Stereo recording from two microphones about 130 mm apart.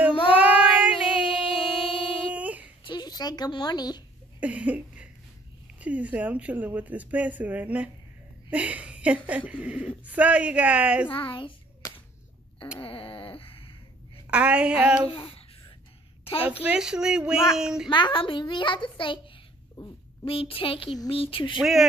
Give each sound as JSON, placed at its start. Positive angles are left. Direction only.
{"t": 0.3, "sound": "child singing", "side_deg": -10}
{"t": 1.5, "sound": "music", "side_deg": 45}
{"t": 2.3, "sound": "child singing", "side_deg": -10}
{"t": 2.8, "sound": "a woman's voice", "side_deg": 35}
{"t": 4.4, "sound": "speech", "side_deg": -10}
{"t": 11.1, "sound": "a child's voice", "side_deg": 40}
{"t": 12.8, "sound": "a sound", "side_deg": 45}
{"t": 14.3, "sound": "speech", "side_deg": -10}
{"t": 15.0, "sound": "babbling", "side_deg": 40}
{"t": 16.6, "sound": "speech", "side_deg": -5}
{"t": 17.8, "sound": "a child's voice", "side_deg": 35}
{"t": 21.5, "sound": "speech", "side_deg": -5}